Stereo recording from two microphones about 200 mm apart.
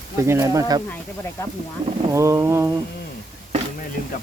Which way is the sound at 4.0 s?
40° right (ahead or behind).